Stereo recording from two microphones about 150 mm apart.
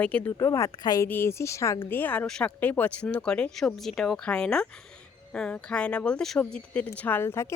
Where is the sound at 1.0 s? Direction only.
15° left (ahead or behind).